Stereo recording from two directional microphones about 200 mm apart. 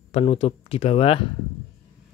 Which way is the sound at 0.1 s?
30° left (ahead or behind).